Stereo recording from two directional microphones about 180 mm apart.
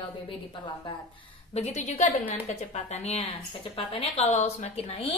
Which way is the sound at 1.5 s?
40° left (ahead or behind).